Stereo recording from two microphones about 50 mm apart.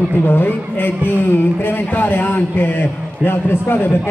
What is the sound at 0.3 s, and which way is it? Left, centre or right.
A man's voice, left.